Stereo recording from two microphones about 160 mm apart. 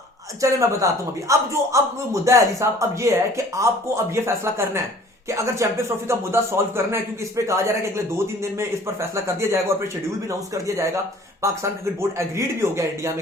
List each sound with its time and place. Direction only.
0.4 s speech: 20° right (ahead or behind)